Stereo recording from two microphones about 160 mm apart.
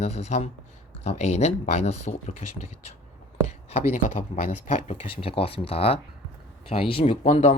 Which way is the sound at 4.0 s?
55° left (ahead or behind).